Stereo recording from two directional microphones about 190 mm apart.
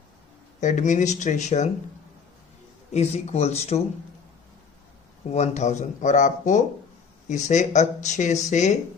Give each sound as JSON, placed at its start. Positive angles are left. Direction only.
{"t": 0.6, "sound": "speech", "side_deg": 40}
{"t": 2.9, "sound": "speech", "side_deg": 35}
{"t": 5.3, "sound": "speech", "side_deg": 35}